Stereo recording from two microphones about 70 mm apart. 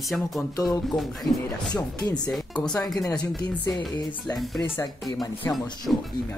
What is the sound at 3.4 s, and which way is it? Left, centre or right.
Speech, left.